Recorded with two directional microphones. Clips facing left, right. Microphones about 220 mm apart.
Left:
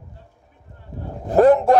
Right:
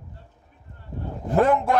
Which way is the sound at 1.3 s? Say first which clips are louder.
Left 6 dB; 40° left (ahead or behind).